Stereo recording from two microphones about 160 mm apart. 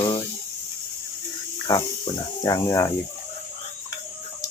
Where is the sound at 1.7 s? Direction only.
25° left (ahead or behind).